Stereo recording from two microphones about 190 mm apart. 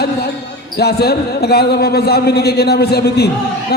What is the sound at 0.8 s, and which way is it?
Speech, 55° left (ahead or behind).